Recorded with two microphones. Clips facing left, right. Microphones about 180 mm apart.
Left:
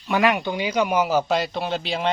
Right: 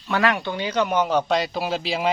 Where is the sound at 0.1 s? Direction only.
15° left (ahead or behind).